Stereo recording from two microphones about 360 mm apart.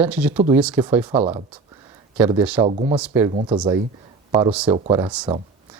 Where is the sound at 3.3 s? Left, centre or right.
Centre.